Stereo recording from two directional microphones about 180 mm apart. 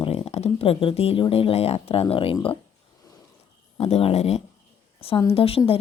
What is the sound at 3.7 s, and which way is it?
A woman's voice, 35° left (ahead or behind).